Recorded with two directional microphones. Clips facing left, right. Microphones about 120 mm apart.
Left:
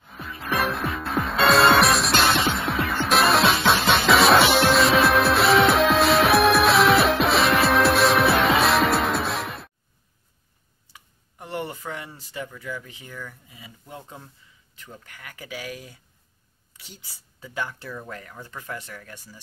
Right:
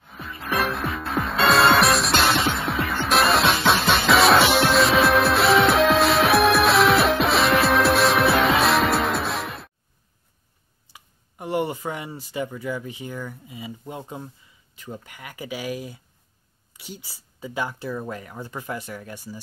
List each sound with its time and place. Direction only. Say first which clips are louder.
0.0 s music: even; centre (ahead or behind)
10.9 s speech: right 1 dB; 15° right (ahead or behind)